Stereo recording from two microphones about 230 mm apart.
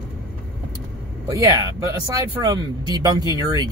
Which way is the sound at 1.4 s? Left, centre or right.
Centre.